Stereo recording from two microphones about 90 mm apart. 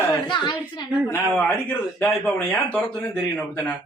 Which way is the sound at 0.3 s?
60° left (ahead or behind).